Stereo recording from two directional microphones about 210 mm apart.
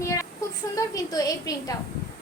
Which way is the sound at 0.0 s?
15° left (ahead or behind).